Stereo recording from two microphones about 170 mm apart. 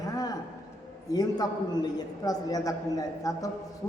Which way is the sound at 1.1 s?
20° left (ahead or behind).